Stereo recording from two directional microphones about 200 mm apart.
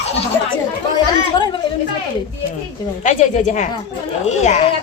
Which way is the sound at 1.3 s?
25° left (ahead or behind).